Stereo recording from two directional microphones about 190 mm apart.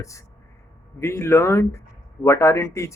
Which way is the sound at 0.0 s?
15° left (ahead or behind).